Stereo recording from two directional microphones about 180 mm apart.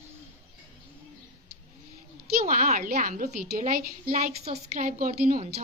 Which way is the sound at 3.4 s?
55° right (ahead or behind).